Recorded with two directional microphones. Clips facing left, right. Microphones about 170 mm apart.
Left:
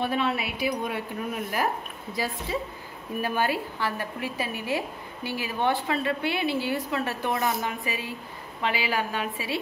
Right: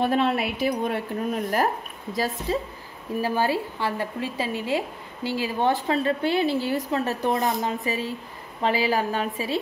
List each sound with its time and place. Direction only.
0.0 s speech: 45° right (ahead or behind)
1.3 s speech: 40° right (ahead or behind)
3.2 s a woman's voice: 30° right (ahead or behind)
5.7 s speech: 40° right (ahead or behind)